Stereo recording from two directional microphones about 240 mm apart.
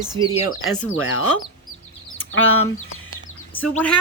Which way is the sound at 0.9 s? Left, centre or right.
Left.